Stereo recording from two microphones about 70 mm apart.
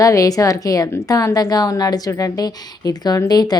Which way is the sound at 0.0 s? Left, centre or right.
Left.